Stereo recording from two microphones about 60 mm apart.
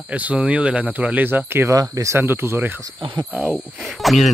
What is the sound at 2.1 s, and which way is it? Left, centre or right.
Speech, right.